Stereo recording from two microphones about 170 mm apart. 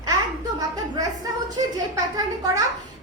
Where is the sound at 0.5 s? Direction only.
20° right (ahead or behind).